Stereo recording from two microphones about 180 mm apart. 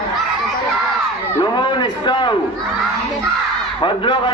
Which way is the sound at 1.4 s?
25° left (ahead or behind).